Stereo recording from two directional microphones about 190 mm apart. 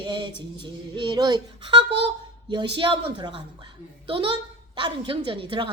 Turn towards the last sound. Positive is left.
turn(degrees=-25)  # may be behind; listen again after turning